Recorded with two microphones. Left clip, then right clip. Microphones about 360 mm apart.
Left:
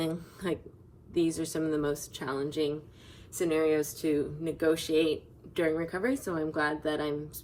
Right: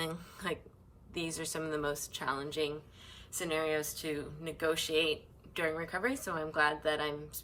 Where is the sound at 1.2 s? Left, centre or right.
Centre.